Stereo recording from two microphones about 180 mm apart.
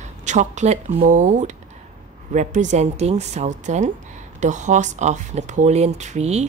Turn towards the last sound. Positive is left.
turn(degrees=-40)  # may be behind; listen again after turning